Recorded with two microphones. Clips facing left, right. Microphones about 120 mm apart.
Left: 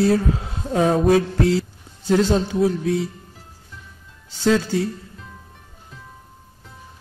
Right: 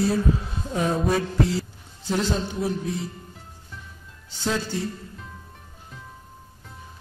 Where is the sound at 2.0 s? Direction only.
90° left.